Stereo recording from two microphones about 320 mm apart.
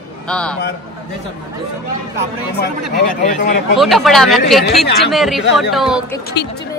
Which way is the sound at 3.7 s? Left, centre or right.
Centre.